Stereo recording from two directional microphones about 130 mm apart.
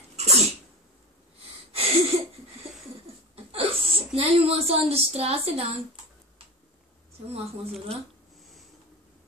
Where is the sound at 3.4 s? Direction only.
45° right (ahead or behind).